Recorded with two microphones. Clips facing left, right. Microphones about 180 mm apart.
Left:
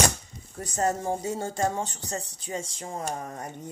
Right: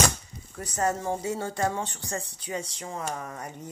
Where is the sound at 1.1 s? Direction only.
45° left (ahead or behind).